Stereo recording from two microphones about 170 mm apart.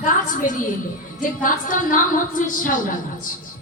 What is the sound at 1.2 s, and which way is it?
A woman's voice, 50° left (ahead or behind).